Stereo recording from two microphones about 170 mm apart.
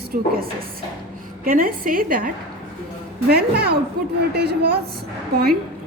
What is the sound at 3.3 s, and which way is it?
A woman's voice, 70° right (ahead or behind).